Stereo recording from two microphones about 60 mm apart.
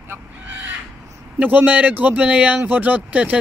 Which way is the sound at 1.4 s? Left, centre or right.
Right.